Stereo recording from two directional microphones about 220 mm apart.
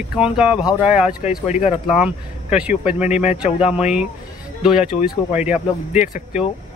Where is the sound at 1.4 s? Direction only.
30° left (ahead or behind).